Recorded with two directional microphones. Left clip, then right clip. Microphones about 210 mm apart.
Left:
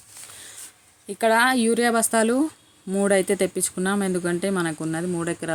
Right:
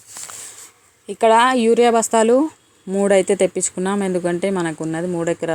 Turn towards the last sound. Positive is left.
turn(degrees=0)  # may be behind; listen again after turning